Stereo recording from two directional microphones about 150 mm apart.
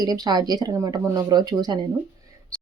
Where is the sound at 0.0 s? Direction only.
25° right (ahead or behind).